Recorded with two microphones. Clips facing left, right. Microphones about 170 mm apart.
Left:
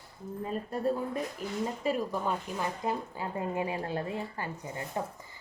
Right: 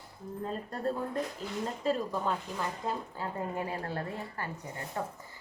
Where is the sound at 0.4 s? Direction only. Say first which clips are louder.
Left 3 dB; 10° left (ahead or behind).